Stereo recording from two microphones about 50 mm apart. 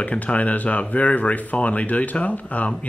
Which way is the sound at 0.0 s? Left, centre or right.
Left.